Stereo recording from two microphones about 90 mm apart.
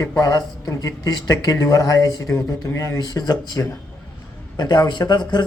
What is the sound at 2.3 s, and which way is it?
Speech, 35° left (ahead or behind).